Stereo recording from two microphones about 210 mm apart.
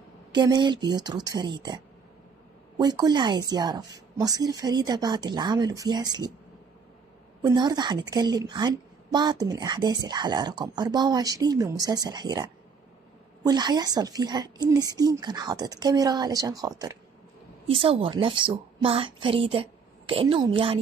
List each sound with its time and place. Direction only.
0.3 s speech: 20° right (ahead or behind)
2.8 s speech: 20° right (ahead or behind)
7.4 s a woman's voice: 20° right (ahead or behind)